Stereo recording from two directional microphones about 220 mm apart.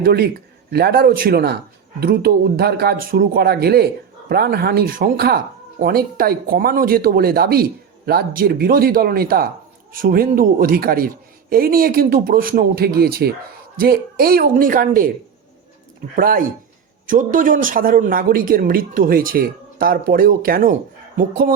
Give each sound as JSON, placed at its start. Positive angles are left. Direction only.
{"t": 0.0, "sound": "speech", "side_deg": -45}
{"t": 16.1, "sound": "speech", "side_deg": -40}